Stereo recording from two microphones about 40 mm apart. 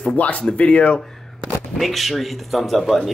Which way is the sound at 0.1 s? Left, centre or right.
Left.